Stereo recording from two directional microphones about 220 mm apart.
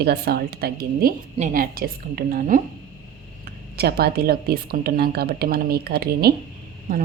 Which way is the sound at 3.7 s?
45° right (ahead or behind).